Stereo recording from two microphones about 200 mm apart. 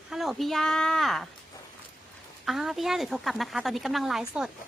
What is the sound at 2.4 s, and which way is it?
Speech, centre (ahead or behind).